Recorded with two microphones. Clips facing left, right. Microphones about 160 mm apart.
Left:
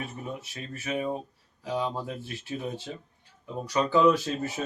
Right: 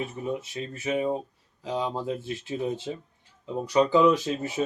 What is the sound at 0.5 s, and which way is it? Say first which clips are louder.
Speech: right 4 dB; 20° right (ahead or behind).